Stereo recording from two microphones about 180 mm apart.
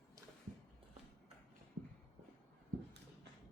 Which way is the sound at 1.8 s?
90° right.